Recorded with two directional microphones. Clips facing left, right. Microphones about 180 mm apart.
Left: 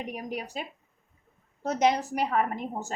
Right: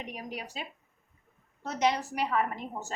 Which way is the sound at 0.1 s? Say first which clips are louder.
Left 5 dB; 45° left (ahead or behind).